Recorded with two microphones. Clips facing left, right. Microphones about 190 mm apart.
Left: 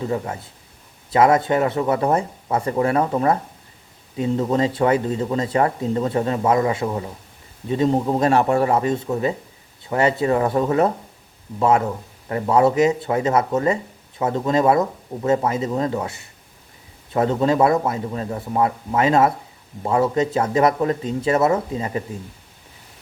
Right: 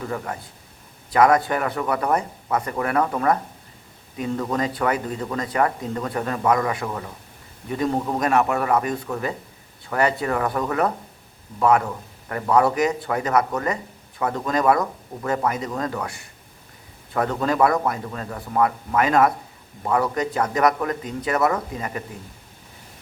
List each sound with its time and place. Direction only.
0.0 s speech: 20° left (ahead or behind)
12.3 s speech: 25° left (ahead or behind)